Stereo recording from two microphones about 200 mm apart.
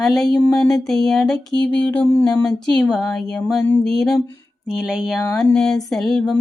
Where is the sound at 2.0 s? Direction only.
15° left (ahead or behind).